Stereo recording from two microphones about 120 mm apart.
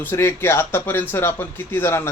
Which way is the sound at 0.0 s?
20° left (ahead or behind).